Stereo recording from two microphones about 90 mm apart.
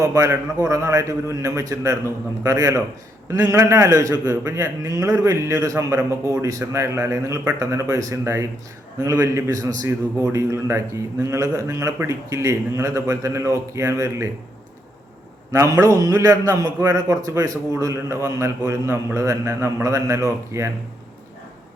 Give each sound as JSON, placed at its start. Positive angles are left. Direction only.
{"t": 0.0, "sound": "a man's voice", "side_deg": -35}
{"t": 15.6, "sound": "a man's voice", "side_deg": -40}